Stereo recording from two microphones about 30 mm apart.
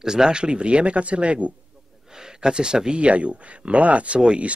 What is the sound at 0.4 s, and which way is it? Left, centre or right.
Speech, right.